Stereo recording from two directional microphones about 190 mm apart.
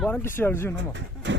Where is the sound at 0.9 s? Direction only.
75° right (ahead or behind).